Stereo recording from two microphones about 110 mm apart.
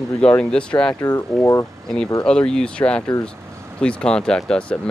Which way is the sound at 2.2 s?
5° left (ahead or behind).